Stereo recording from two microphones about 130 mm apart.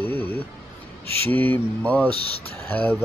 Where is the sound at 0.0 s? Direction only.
15° left (ahead or behind).